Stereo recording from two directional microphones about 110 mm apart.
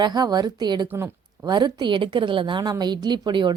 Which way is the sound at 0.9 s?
20° right (ahead or behind).